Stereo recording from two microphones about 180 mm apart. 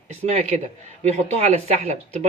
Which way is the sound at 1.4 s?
35° right (ahead or behind).